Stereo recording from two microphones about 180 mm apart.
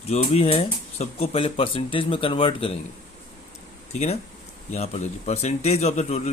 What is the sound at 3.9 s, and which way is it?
Speech, 35° left (ahead or behind).